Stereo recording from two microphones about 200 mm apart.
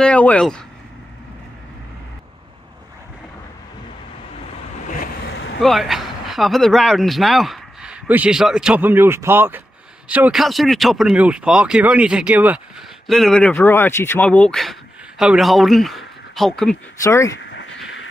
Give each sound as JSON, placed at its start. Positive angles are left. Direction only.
{"t": 0.0, "sound": "speech", "side_deg": 5}
{"t": 5.6, "sound": "speech", "side_deg": 0}
{"t": 17.0, "sound": "speech", "side_deg": 15}
{"t": 17.4, "sound": "a sound", "side_deg": 60}